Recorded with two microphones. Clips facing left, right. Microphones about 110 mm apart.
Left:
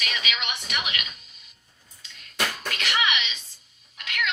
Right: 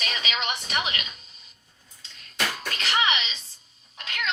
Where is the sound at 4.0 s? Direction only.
30° right (ahead or behind).